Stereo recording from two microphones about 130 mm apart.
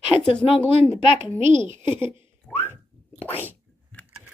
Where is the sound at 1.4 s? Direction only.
65° right (ahead or behind).